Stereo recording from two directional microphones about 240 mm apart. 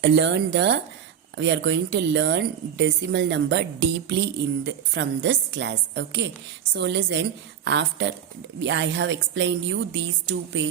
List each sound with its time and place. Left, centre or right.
0.0 s a woman's voice: right